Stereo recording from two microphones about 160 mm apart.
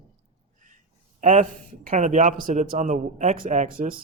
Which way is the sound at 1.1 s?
50° right (ahead or behind).